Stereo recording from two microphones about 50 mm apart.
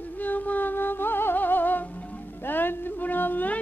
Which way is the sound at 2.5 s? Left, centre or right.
Left.